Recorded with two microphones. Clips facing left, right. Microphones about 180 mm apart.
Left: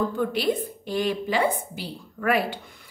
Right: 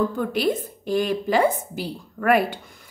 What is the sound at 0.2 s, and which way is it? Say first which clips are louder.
A woman's voice: right 1 dB; 45° right (ahead or behind).